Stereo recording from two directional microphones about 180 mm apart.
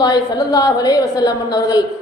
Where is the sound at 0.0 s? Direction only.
20° left (ahead or behind).